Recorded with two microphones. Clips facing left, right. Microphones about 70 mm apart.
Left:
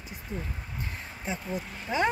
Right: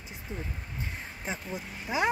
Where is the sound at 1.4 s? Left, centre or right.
Centre.